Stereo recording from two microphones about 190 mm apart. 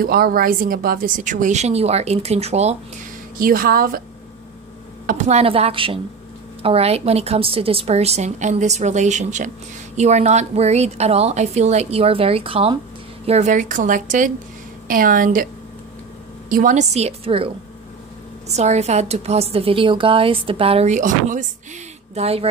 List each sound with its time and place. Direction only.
0.0 s a woman's voice: 50° right (ahead or behind); by 2.7 s 35° right (ahead or behind)
3.3 s a woman's voice: 50° right (ahead or behind)
5.0 s a woman's voice: 40° right (ahead or behind)
16.4 s a woman's voice: 45° right (ahead or behind); by 17.5 s 30° right (ahead or behind)
18.5 s a woman's voice: 35° right (ahead or behind)